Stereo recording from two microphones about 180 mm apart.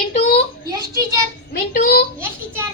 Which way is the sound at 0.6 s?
20° right (ahead or behind).